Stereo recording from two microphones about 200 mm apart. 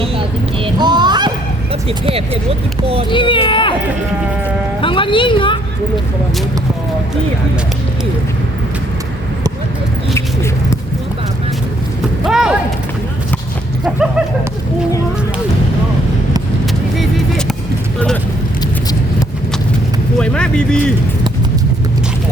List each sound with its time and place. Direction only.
0.6 s fowl: 20° right (ahead or behind)
2.0 s speech: 30° right (ahead or behind)
3.1 s a woman's voice: 25° left (ahead or behind)
4.8 s a woman's voice: 25° left (ahead or behind)
12.2 s a sound: 5° right (ahead or behind)
20.1 s speech: 5° left (ahead or behind)